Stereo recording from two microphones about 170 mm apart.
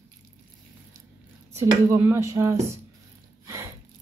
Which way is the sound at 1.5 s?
15° right (ahead or behind).